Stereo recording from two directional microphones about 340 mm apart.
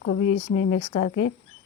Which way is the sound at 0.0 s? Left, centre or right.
Left.